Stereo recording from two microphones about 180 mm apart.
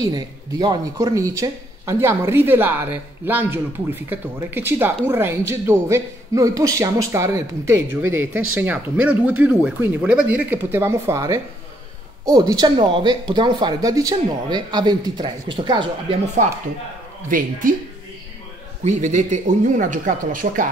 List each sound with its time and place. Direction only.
0.0 s speech: 20° right (ahead or behind)
17.3 s speech: 50° right (ahead or behind)
18.9 s speech: 40° right (ahead or behind)